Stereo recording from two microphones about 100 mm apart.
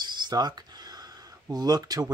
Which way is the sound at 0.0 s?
45° right (ahead or behind).